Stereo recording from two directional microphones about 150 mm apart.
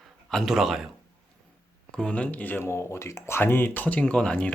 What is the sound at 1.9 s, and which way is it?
Speech, 5° left (ahead or behind).